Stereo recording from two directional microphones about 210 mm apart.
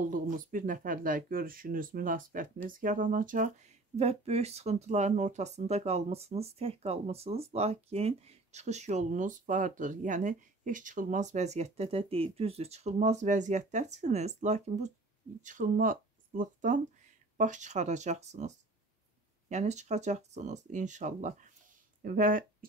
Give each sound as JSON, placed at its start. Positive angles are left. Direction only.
{"t": 0.1, "sound": "speech", "side_deg": -40}
{"t": 19.5, "sound": "speech", "side_deg": -35}